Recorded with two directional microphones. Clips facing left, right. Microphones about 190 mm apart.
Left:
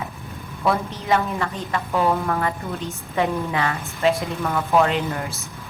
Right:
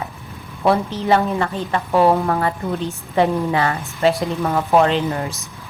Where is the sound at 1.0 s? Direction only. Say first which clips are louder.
Right 4 dB; 35° right (ahead or behind).